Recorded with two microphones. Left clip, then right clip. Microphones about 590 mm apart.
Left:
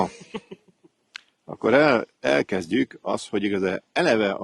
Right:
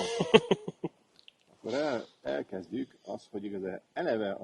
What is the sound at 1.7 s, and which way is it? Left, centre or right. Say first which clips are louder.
Speech: left 14 dB; left.